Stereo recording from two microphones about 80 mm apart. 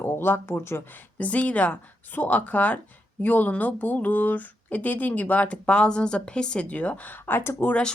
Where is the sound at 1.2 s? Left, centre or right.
Centre.